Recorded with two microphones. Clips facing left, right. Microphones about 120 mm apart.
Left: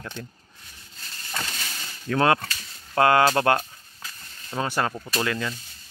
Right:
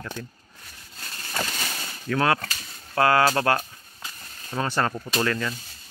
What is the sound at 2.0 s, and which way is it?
Speech, 25° left (ahead or behind).